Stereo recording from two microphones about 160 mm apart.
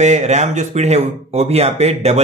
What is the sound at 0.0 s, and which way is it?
A man's voice, 45° right (ahead or behind).